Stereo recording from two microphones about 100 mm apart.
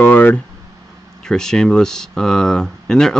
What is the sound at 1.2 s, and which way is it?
Speech, 5° left (ahead or behind).